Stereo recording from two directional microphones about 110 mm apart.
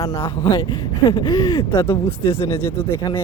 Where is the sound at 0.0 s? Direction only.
30° left (ahead or behind).